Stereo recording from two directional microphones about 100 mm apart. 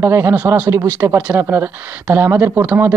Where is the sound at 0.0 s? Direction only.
25° right (ahead or behind).